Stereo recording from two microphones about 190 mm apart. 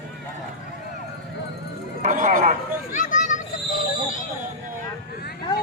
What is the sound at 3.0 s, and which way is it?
Children playing, 40° left (ahead or behind).